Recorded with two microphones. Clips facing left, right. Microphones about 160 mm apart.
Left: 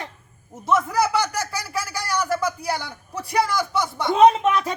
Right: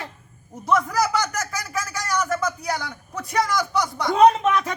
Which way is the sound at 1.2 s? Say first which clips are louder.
Left 1 dB; 30° left (ahead or behind).